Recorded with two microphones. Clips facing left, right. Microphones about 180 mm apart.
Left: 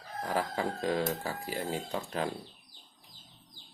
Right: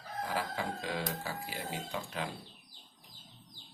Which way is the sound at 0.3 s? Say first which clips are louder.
Left 5 dB; 45° left (ahead or behind).